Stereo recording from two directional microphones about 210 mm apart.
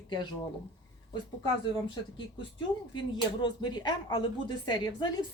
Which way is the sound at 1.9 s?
20° left (ahead or behind).